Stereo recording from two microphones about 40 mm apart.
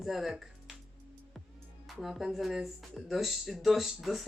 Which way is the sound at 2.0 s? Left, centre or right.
Centre.